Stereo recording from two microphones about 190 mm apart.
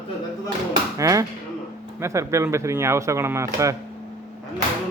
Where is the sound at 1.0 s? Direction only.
15° right (ahead or behind).